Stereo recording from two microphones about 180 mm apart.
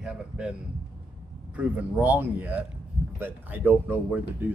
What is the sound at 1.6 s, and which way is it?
Speech, 10° right (ahead or behind).